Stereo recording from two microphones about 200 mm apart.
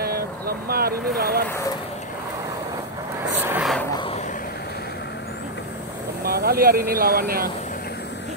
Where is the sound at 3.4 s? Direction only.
5° right (ahead or behind).